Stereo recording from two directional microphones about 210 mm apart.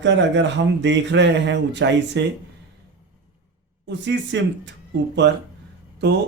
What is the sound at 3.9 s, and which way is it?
Speech, 60° right (ahead or behind).